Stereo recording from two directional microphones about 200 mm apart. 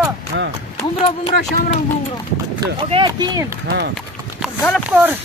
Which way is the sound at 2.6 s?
25° right (ahead or behind).